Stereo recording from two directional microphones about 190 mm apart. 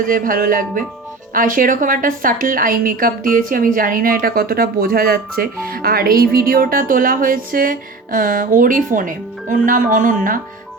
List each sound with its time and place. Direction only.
0.0 s a woman's voice: 45° right (ahead or behind)